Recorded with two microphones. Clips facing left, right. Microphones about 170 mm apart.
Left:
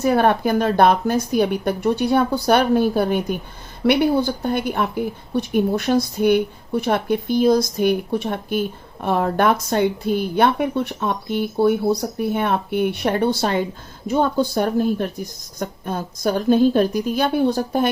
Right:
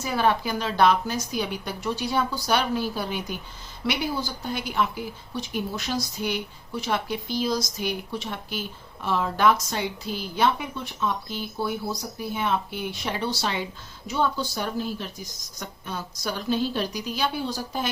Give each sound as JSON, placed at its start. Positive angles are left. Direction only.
{"t": 0.0, "sound": "a woman's voice", "side_deg": 55}